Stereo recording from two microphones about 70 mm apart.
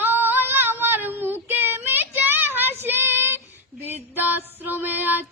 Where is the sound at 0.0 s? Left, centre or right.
Right.